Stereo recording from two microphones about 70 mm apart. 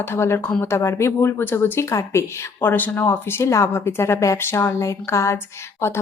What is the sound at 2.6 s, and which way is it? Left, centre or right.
A woman's voice, left.